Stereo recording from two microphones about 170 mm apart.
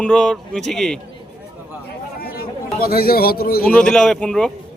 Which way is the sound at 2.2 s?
60° left (ahead or behind).